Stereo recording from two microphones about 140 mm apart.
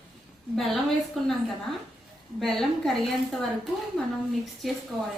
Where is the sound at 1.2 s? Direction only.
Centre (ahead or behind).